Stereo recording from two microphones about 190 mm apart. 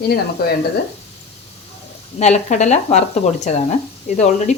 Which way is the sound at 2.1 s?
35° left (ahead or behind).